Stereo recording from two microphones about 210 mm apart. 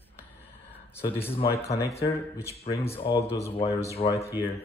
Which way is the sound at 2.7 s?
15° left (ahead or behind).